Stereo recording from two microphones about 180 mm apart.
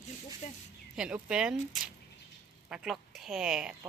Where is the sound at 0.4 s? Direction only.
45° left (ahead or behind).